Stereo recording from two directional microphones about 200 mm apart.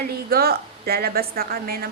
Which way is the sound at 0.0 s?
50° right (ahead or behind).